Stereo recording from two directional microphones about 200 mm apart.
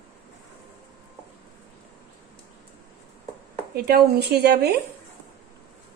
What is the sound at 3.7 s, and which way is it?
Speech, 50° right (ahead or behind).